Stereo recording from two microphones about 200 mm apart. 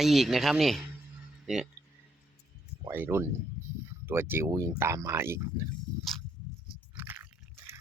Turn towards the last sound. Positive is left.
turn(degrees=-10)  # may be behind; listen again after turning